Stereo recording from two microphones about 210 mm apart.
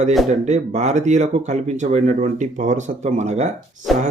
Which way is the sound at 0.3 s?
35° right (ahead or behind).